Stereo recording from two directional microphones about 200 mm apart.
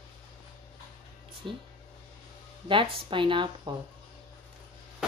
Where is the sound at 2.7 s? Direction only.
25° right (ahead or behind).